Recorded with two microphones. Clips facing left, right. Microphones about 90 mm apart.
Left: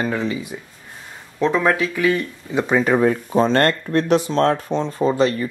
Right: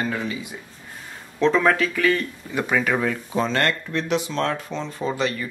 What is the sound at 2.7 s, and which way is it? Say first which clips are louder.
Speech: left 6 dB; 30° left (ahead or behind).